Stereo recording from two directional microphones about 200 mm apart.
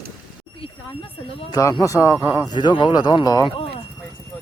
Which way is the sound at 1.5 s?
15° left (ahead or behind).